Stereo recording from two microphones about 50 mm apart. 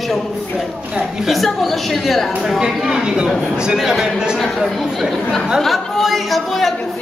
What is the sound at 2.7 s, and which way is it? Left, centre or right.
Speech, centre.